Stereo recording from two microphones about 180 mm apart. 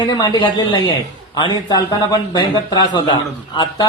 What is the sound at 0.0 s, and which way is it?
Speech, 25° left (ahead or behind).